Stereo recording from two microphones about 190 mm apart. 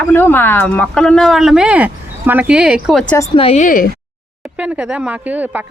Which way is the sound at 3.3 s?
30° left (ahead or behind).